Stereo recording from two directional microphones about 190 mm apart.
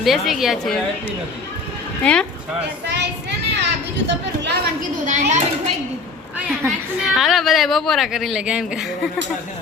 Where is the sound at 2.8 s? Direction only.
65° right (ahead or behind).